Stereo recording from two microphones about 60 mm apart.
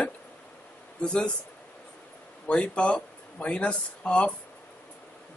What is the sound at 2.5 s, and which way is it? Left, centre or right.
Speech, centre.